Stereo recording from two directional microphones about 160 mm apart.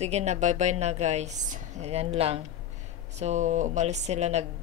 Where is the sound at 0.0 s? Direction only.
45° right (ahead or behind).